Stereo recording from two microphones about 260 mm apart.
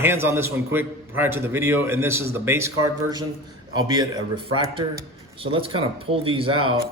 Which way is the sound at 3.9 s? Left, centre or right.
Centre.